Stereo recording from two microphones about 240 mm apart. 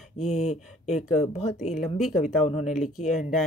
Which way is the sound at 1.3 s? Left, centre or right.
Left.